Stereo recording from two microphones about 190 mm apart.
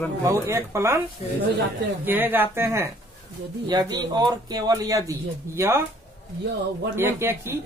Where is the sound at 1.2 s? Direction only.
40° left (ahead or behind).